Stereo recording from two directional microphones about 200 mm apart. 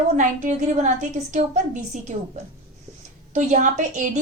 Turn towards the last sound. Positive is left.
turn(degrees=-40)  # may be behind; listen again after turning